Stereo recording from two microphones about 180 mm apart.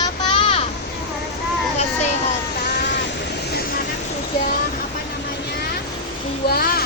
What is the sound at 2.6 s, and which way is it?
Vehicle, 70° left (ahead or behind).